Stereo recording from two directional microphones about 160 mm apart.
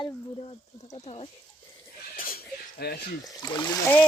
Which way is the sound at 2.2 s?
65° left (ahead or behind).